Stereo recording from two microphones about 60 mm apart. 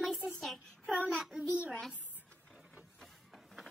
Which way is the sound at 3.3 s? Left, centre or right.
Centre.